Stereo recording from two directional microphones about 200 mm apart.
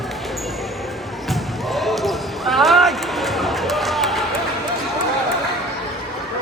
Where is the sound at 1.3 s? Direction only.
Centre (ahead or behind).